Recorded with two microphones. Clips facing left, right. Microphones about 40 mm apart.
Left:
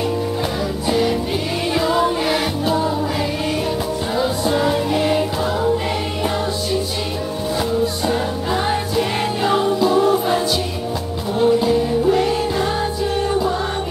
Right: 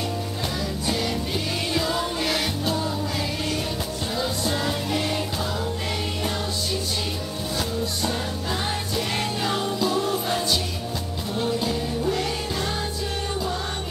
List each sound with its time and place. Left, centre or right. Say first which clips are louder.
0.8 s music: left 9 dB; centre
4.2 s music: left 8 dB; centre
7.8 s music: left 7 dB; centre